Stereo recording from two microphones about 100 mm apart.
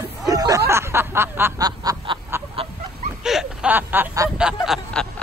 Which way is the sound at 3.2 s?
5° right (ahead or behind).